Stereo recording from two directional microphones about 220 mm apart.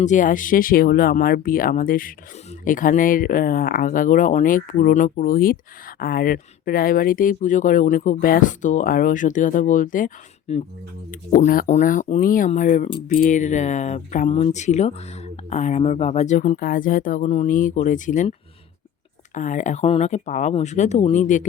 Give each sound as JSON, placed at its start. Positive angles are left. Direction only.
{"t": 0.0, "sound": "speech", "side_deg": 35}